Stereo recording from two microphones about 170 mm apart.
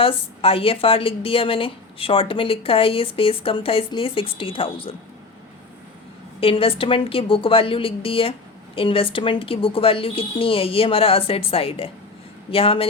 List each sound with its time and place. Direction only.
0.0 s a woman's voice: 35° left (ahead or behind)
6.4 s a woman's voice: 35° left (ahead or behind)